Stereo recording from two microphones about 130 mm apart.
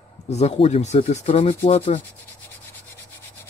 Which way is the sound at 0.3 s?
55° left (ahead or behind).